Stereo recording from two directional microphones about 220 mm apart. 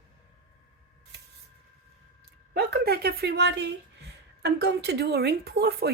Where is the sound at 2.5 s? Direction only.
45° right (ahead or behind).